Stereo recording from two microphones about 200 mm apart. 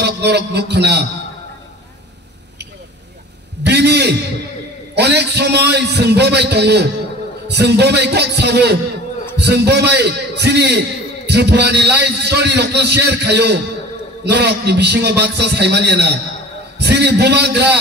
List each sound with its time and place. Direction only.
0.0 s music: 55° right (ahead or behind)
3.6 s a sound: 55° right (ahead or behind)
7.4 s a man's voice: 55° right (ahead or behind)